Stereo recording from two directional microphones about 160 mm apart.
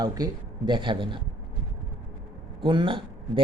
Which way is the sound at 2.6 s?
30° right (ahead or behind).